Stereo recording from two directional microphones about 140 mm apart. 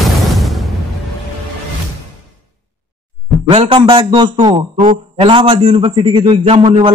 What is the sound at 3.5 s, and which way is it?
A man's voice, 40° right (ahead or behind).